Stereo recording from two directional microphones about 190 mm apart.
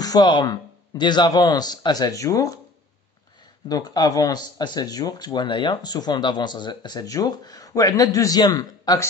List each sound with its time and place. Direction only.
0.0 s speech: 20° left (ahead or behind)
3.6 s speech: 20° left (ahead or behind)